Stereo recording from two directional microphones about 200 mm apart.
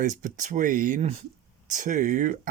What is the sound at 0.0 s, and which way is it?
Speech, 40° right (ahead or behind).